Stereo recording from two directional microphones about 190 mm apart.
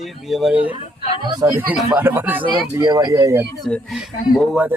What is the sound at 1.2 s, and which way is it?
Speech, 20° right (ahead or behind).